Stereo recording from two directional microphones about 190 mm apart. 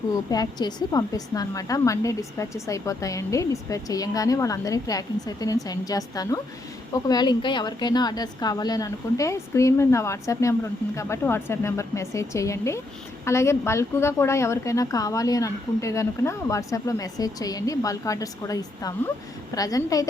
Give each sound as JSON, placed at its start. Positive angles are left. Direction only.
{"t": 0.3, "sound": "a woman's voice", "side_deg": 20}